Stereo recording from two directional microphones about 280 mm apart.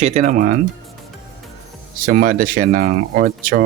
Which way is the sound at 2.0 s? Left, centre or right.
Right.